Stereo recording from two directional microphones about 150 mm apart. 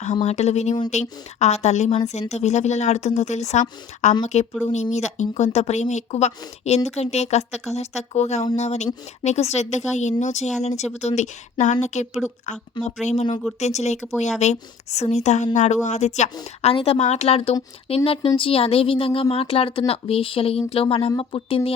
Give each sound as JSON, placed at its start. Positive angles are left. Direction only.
{"t": 0.0, "sound": "speech", "side_deg": 50}